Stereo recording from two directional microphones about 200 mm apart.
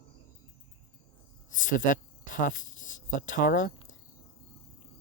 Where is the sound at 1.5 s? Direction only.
40° left (ahead or behind).